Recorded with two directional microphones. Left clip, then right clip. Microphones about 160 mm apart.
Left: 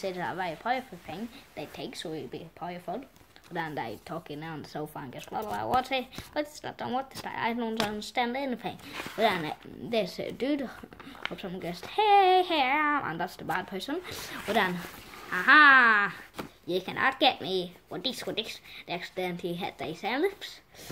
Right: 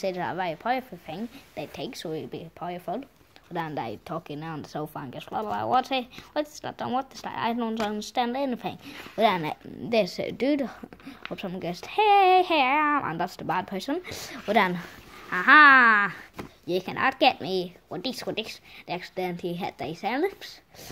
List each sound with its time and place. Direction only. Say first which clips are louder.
0.0 s speech: right 4 dB; 45° right (ahead or behind)
15.2 s speech: right 3 dB; 50° right (ahead or behind)